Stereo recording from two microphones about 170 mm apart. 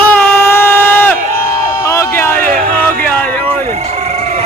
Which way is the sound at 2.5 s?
55° right (ahead or behind).